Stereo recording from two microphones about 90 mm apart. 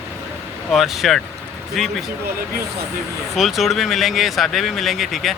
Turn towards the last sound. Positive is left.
turn(degrees=0)  # may be behind; listen again after turning